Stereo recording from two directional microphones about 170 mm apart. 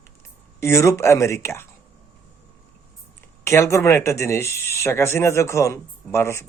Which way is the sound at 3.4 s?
15° left (ahead or behind).